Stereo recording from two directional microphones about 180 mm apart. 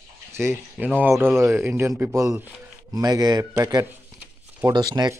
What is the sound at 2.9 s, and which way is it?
Speech, 20° right (ahead or behind).